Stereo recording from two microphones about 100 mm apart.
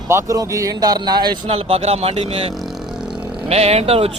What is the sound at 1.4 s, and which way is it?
Speech, 70° right (ahead or behind).